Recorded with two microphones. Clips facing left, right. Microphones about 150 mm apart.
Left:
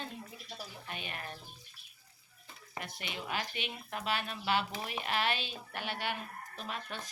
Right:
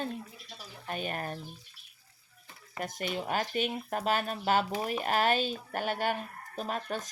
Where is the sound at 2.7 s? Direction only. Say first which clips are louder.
Right 8 dB; 45° right (ahead or behind).